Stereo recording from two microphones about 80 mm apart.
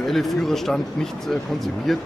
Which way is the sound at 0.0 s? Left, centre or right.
Centre.